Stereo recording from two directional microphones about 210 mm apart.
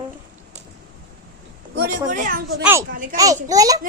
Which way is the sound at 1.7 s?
45° right (ahead or behind).